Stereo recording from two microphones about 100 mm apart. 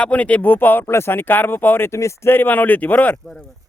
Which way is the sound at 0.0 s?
15° left (ahead or behind).